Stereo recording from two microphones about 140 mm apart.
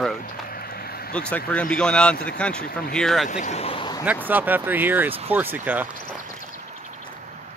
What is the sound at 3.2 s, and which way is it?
Speech, 60° left (ahead or behind).